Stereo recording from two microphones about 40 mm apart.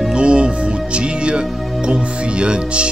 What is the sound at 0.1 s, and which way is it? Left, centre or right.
Music, right.